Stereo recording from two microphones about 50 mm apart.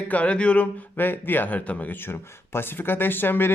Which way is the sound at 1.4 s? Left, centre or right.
Left.